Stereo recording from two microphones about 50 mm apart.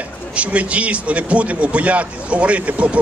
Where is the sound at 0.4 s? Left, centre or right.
Right.